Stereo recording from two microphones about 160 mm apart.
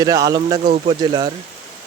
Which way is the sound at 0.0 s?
20° right (ahead or behind).